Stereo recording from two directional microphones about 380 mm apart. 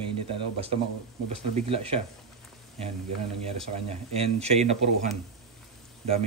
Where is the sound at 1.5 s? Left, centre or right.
Centre.